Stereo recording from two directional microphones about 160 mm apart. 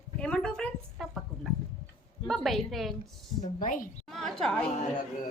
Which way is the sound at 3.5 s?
60° left (ahead or behind).